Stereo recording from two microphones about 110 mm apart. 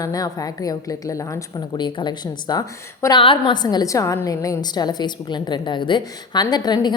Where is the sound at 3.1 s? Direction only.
50° left (ahead or behind).